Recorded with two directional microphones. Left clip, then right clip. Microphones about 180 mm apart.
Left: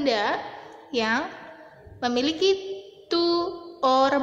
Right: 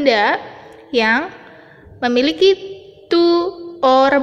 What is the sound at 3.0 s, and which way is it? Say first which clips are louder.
Mantra: right 9 dB; 20° right (ahead or behind).